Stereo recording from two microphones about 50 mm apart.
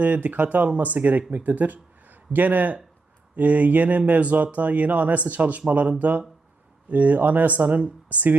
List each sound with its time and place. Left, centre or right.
0.0 s speech: right